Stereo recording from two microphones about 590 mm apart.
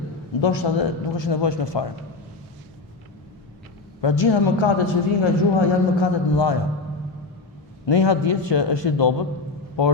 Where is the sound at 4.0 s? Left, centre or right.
Left.